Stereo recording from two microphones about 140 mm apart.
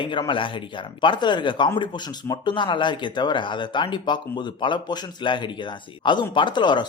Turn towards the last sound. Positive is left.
turn(degrees=35)  # may be behind; listen again after turning